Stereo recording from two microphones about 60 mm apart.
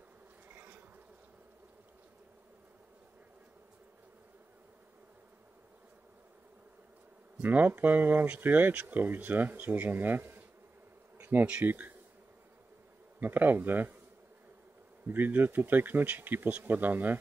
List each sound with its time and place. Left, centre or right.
0.5 s bee: right
7.4 s speech: right
11.4 s speech: right
13.2 s speech: right
15.0 s speech: right